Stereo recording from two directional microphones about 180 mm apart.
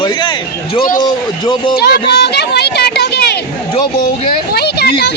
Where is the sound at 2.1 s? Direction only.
70° left (ahead or behind).